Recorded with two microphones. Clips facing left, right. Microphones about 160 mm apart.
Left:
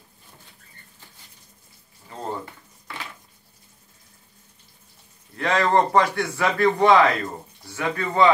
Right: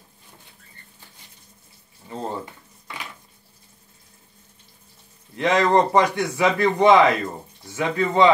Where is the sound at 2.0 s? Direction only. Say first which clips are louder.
Right 2 dB; 20° right (ahead or behind).